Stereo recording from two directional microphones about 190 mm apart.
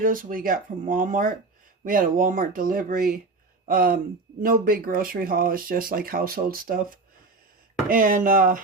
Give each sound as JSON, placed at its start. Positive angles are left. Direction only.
{"t": 0.0, "sound": "speech", "side_deg": -45}